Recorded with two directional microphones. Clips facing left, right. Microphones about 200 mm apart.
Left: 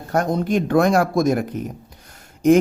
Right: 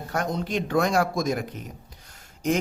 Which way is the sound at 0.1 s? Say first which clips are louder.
Left 8 dB; 50° left (ahead or behind).